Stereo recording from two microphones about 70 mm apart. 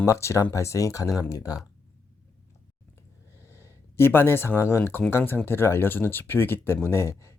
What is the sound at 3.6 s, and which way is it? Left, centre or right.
Speech, left.